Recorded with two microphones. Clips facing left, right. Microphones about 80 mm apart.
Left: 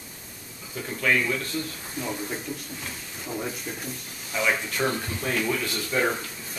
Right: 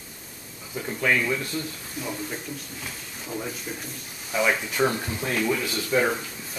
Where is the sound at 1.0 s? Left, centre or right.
Centre.